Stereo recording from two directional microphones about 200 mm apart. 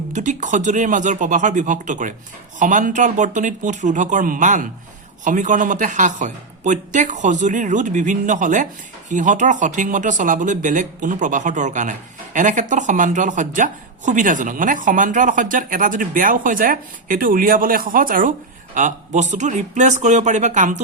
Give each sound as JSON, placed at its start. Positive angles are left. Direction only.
{"t": 0.1, "sound": "speech", "side_deg": -40}